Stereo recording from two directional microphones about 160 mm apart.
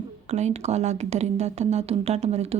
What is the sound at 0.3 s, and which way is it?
A woman's voice, 45° right (ahead or behind).